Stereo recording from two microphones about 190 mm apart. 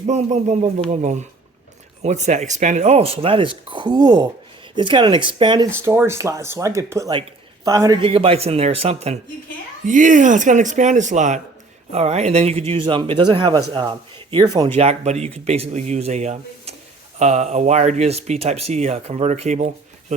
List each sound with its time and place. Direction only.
0.1 s speech: 35° right (ahead or behind)
5.7 s a man's voice: 10° right (ahead or behind)
8.0 s speech: 30° right (ahead or behind)
14.8 s speech: 35° right (ahead or behind)